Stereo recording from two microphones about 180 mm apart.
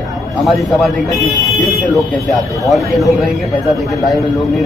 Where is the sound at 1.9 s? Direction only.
Centre (ahead or behind).